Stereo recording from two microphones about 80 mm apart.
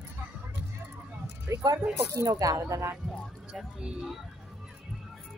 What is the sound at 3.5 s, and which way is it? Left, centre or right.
Speech, centre.